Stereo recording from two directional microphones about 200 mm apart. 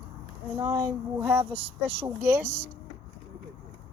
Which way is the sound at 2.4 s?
5° left (ahead or behind).